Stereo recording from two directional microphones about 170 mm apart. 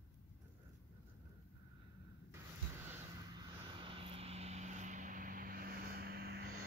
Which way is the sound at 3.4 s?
30° right (ahead or behind).